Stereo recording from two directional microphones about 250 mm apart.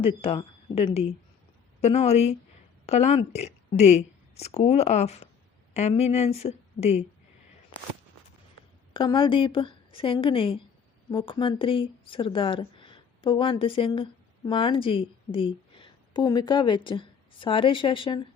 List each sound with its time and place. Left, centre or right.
0.2 s a woman's voice: left
8.9 s a woman's voice: centre